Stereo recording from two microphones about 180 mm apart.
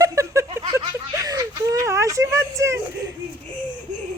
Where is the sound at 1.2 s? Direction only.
20° right (ahead or behind).